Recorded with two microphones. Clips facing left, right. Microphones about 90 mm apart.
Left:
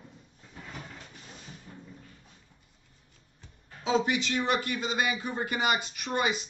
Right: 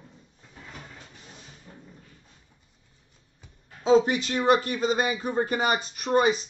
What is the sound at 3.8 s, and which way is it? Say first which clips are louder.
Speech: right 7 dB; 35° right (ahead or behind).